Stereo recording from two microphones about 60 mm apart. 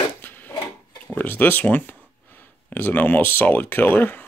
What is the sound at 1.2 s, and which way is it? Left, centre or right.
Speech, left.